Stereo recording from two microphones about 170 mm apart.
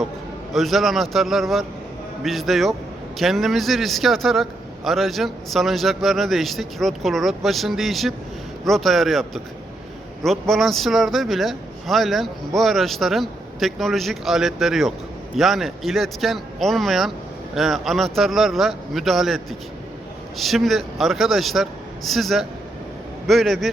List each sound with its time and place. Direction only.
0.5 s a man's voice: centre (ahead or behind)
20.4 s a man's voice: centre (ahead or behind)